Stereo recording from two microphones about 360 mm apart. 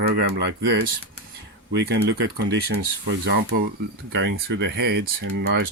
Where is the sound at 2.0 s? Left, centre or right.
Right.